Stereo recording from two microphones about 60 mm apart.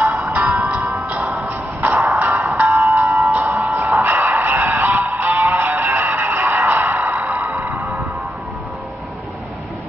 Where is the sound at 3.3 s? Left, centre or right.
Right.